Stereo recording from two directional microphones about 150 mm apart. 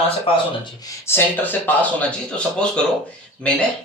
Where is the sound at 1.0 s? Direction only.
15° left (ahead or behind).